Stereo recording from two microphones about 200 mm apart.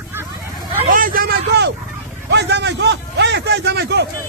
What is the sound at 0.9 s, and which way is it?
A man's voice, 45° right (ahead or behind).